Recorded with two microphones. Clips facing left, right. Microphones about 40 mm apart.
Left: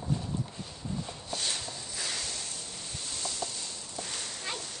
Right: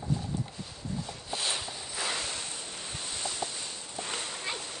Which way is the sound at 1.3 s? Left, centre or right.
Centre.